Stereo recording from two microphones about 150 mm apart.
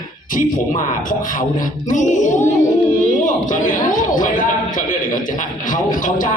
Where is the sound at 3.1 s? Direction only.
60° left (ahead or behind).